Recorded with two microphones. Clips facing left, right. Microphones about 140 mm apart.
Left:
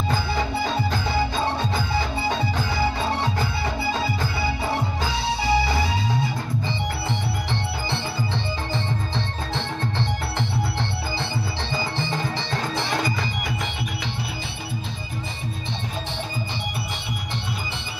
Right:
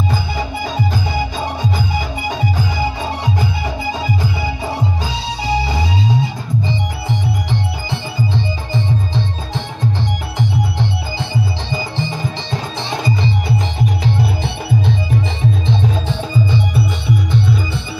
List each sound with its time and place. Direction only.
0.1 s music: 15° right (ahead or behind)
5.5 s music: 20° right (ahead or behind)